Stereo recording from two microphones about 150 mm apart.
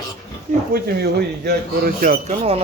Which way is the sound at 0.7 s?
90° right.